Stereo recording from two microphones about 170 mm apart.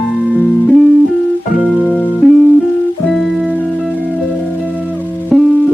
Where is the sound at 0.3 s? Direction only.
10° left (ahead or behind); by 5.0 s 10° right (ahead or behind).